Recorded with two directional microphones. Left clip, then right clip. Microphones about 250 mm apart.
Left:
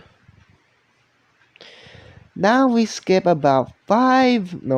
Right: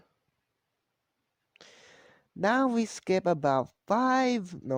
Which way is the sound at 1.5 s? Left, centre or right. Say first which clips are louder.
Left 11 dB; right.